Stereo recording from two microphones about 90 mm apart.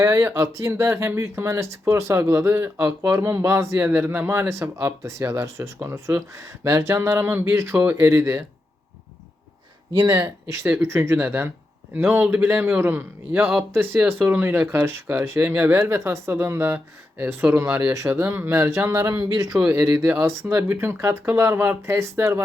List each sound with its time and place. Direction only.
0.0 s speech: 35° right (ahead or behind)
10.1 s speech: 30° right (ahead or behind)
19.5 s speech: 30° right (ahead or behind)